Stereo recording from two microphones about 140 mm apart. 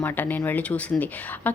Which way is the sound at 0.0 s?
10° left (ahead or behind).